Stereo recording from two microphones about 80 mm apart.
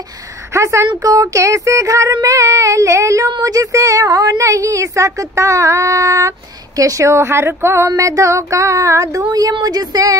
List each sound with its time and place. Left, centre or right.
0.5 s a woman's voice: right
1.0 s child singing: right
3.3 s a woman's voice: right
6.8 s child singing: right